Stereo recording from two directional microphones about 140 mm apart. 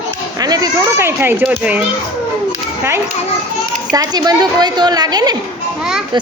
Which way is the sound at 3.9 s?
30° right (ahead or behind).